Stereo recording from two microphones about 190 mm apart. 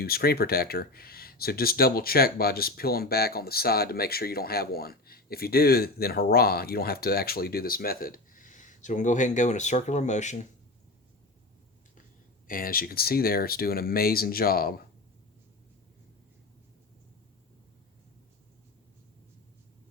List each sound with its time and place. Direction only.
0.0 s speech: 55° left (ahead or behind); by 10.4 s 40° left (ahead or behind)
12.5 s speech: 50° left (ahead or behind)